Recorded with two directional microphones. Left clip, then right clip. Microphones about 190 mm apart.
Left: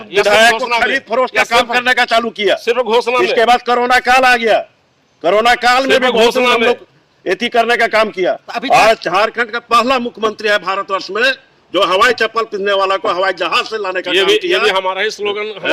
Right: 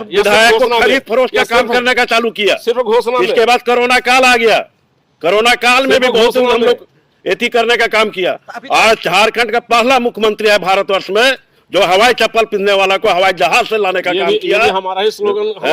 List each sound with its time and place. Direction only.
0.3 s a man's voice: 35° right (ahead or behind)
2.6 s speech: 20° right (ahead or behind)
3.2 s a man's voice: 35° right (ahead or behind)
6.4 s speech: 15° right (ahead or behind)
7.3 s a man's voice: 35° right (ahead or behind)
14.1 s speech: 15° right (ahead or behind)